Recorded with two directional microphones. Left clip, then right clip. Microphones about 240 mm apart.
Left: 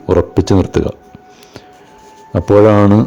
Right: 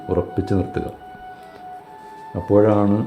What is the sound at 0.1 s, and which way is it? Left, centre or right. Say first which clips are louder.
Speech: left 10 dB; left.